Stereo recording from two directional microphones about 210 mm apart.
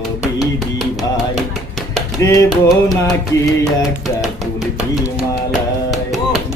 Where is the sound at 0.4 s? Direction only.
Centre (ahead or behind).